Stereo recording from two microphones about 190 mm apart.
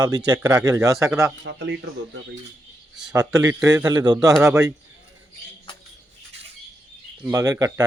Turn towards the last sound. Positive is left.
turn(degrees=-20)  # may be behind; listen again after turning